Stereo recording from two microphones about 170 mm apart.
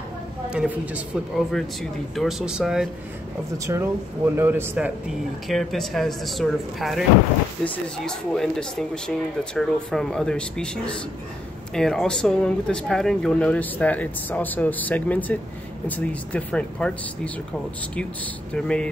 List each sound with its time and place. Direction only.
0.5 s speech: 5° right (ahead or behind)
3.5 s a man's voice: 15° right (ahead or behind)
5.5 s speech: centre (ahead or behind)
18.5 s speech: 5° left (ahead or behind)